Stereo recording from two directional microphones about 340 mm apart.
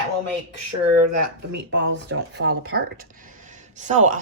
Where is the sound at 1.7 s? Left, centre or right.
Right.